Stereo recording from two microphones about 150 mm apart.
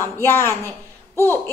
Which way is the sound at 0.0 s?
15° left (ahead or behind).